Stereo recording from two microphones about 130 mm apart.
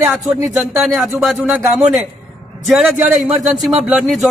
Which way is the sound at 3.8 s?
5° right (ahead or behind).